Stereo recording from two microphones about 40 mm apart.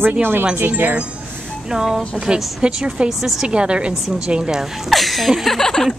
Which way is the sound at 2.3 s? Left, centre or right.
Right.